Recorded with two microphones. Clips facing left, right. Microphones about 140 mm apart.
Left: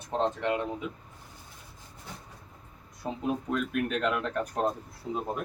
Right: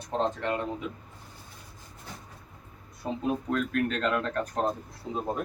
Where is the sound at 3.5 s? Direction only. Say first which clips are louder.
Right 2 dB; 10° left (ahead or behind).